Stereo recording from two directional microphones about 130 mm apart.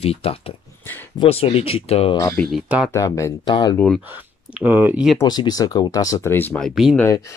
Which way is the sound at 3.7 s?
10° left (ahead or behind).